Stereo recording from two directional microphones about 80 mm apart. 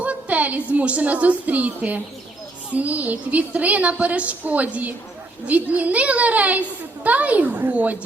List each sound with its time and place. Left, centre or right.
0.0 s a woman's voice: centre